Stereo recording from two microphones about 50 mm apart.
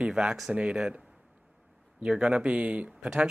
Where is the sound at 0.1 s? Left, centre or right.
Centre.